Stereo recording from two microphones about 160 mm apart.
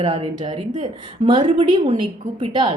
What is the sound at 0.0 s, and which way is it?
A woman's voice, 35° right (ahead or behind).